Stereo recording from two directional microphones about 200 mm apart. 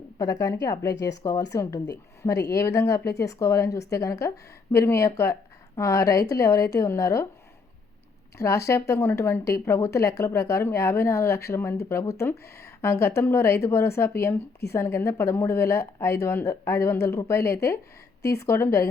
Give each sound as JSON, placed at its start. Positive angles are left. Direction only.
{"t": 0.2, "sound": "speech", "side_deg": 15}
{"t": 2.5, "sound": "speech", "side_deg": 15}
{"t": 8.4, "sound": "speech", "side_deg": 15}